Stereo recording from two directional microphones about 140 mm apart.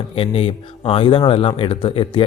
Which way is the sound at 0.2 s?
40° left (ahead or behind).